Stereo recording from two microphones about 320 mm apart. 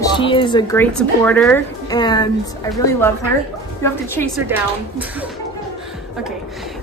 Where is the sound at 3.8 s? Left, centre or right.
Centre.